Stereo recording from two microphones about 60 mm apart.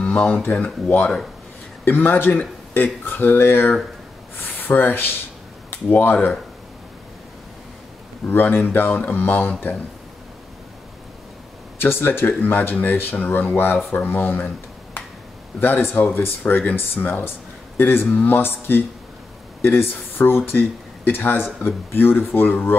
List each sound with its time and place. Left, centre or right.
0.0 s a sound: centre
1.9 s speech: left
8.3 s speech: left
11.8 s speech: left
15.6 s speech: left